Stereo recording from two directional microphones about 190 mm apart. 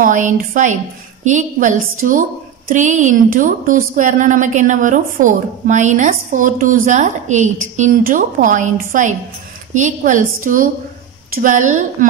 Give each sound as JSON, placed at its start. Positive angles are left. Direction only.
{"t": 0.0, "sound": "a woman's voice", "side_deg": -40}